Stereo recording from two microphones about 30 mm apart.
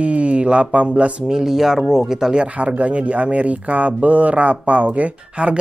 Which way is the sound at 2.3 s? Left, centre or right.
Right.